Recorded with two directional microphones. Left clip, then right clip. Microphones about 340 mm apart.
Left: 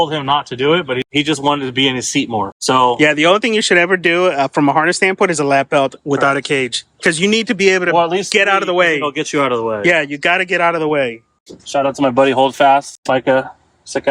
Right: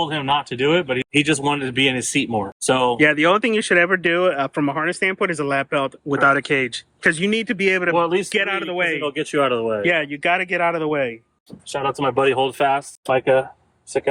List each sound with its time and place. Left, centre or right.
0.0 s speech: centre
7.9 s speech: centre
8.3 s speech: centre
9.0 s speech: left
9.8 s speech: centre
12.2 s speech: left